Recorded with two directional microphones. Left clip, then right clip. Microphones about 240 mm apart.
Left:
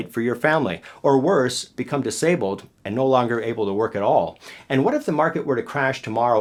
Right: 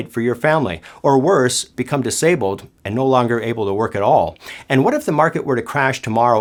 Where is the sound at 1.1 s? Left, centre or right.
Right.